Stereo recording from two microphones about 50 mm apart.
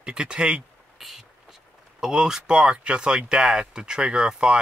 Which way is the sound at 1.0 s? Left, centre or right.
Centre.